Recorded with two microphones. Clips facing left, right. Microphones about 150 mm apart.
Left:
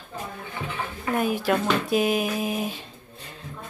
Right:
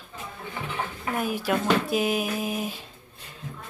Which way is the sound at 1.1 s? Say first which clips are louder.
Left 3 dB; 5° right (ahead or behind).